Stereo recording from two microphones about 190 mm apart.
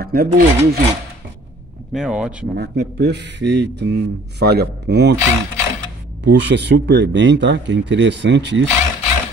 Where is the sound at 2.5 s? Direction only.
60° right (ahead or behind).